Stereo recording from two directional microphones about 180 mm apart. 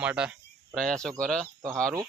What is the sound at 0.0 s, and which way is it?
Speech, 5° right (ahead or behind).